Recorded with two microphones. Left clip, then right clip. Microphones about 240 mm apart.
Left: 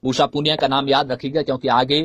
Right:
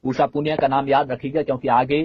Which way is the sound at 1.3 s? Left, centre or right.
Left.